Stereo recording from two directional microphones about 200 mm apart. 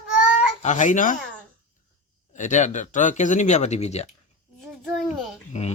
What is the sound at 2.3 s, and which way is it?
Speech, 40° left (ahead or behind).